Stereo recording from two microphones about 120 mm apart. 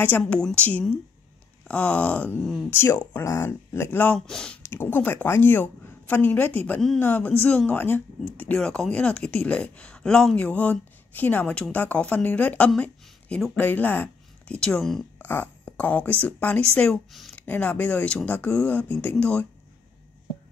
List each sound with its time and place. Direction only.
0.2 s speech: 5° left (ahead or behind)
15.2 s speech: 15° left (ahead or behind)
17.4 s speech: 15° left (ahead or behind)